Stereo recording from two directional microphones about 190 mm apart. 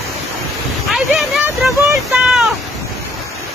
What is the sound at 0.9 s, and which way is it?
Speech, centre (ahead or behind).